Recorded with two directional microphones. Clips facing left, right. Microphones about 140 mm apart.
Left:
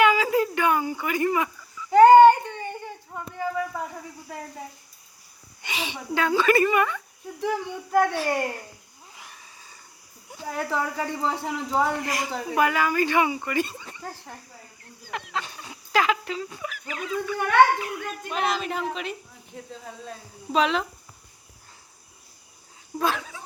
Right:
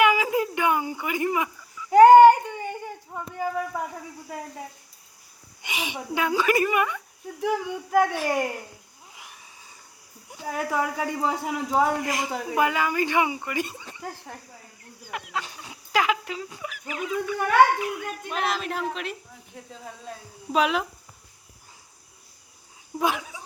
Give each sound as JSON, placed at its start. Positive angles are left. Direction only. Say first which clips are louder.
{"t": 0.0, "sound": "a sound", "louder": "left 1 dB", "side_deg": -15}
{"t": 5.6, "sound": "speech", "louder": "even", "side_deg": -15}
{"t": 9.1, "sound": "wheeze", "louder": "left 1 dB", "side_deg": -15}
{"t": 10.3, "sound": "speech", "louder": "right 1 dB", "side_deg": -10}
{"t": 18.3, "sound": "a woman's voice", "louder": "left 2 dB", "side_deg": 0}
{"t": 20.5, "sound": "speech", "louder": "even", "side_deg": -5}
{"t": 23.0, "sound": "speech", "louder": "even", "side_deg": -15}